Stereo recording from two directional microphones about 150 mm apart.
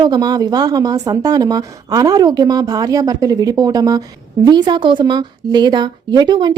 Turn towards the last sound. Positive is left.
turn(degrees=-30)  # may be behind; listen again after turning